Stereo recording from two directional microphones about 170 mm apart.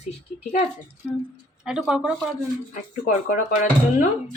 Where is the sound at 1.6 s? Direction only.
5° right (ahead or behind).